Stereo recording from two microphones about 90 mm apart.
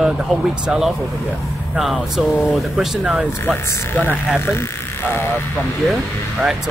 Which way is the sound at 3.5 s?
20° left (ahead or behind).